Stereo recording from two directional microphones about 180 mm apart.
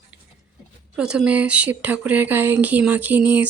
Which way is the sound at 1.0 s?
5° right (ahead or behind).